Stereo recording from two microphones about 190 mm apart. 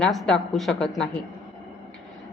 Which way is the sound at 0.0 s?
Centre (ahead or behind).